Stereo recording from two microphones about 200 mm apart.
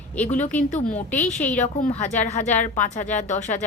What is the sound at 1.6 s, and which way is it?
A woman's voice, 35° left (ahead or behind).